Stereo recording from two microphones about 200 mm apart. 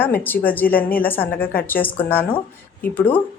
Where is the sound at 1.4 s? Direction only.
45° left (ahead or behind).